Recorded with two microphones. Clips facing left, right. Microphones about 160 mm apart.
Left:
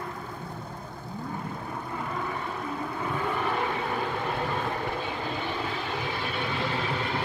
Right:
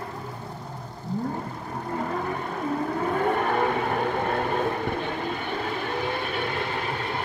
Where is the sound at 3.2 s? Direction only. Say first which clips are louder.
Right 5 dB; 55° right (ahead or behind).